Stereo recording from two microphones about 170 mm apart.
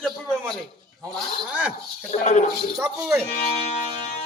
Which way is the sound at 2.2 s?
40° left (ahead or behind).